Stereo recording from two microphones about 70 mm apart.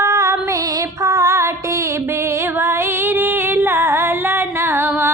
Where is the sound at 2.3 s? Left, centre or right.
Right.